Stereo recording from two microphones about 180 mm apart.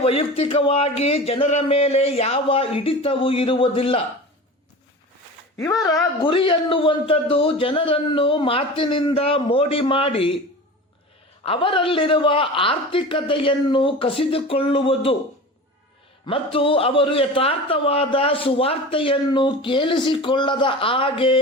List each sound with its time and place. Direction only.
0.0 s speech: 30° left (ahead or behind)
5.6 s a man's voice: 20° left (ahead or behind)
11.4 s a man's voice: 30° left (ahead or behind)
16.2 s a man's voice: 30° left (ahead or behind)